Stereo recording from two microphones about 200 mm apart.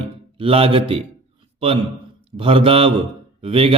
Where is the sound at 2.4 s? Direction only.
25° right (ahead or behind).